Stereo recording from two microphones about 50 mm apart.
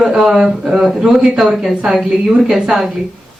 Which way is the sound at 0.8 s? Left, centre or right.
Centre.